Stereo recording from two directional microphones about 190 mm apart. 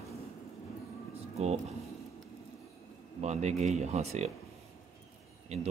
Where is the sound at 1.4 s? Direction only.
35° right (ahead or behind).